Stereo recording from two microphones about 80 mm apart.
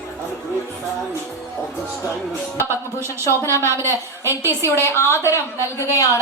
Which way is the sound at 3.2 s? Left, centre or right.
Left.